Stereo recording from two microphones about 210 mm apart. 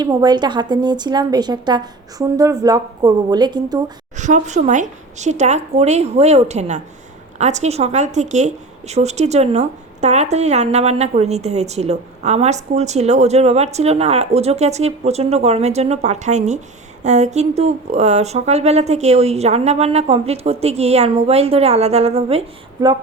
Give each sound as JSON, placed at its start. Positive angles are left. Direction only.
{"t": 0.0, "sound": "a woman's voice", "side_deg": -20}
{"t": 4.2, "sound": "a woman's voice", "side_deg": -35}